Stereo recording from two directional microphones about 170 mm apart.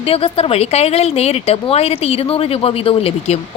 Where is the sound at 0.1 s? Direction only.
35° left (ahead or behind).